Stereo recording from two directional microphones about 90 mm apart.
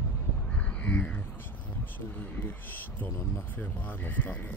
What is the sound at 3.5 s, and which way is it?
Speech, 20° left (ahead or behind).